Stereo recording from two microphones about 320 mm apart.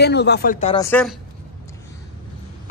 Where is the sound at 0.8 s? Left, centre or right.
Centre.